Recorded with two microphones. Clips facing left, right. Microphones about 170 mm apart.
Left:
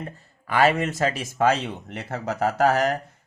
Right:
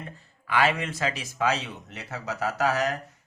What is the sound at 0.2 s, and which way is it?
Speech, 45° left (ahead or behind).